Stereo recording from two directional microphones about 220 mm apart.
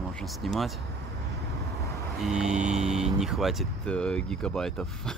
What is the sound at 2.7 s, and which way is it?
Speech, 30° right (ahead or behind).